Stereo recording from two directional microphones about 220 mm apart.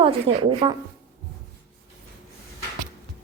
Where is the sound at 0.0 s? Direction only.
25° right (ahead or behind).